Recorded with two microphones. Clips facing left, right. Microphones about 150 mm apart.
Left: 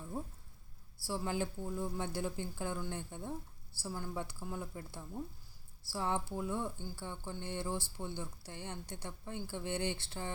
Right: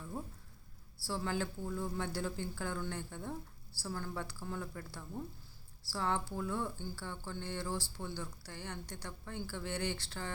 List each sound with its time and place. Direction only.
1.0 s a woman's voice: 15° left (ahead or behind)